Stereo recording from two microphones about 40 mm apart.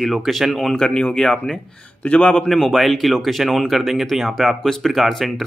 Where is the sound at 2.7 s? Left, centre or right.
Centre.